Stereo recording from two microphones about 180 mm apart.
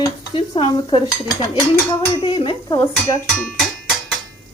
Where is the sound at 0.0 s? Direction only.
30° left (ahead or behind).